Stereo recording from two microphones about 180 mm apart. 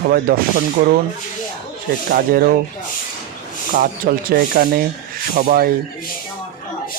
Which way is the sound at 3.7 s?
55° right (ahead or behind).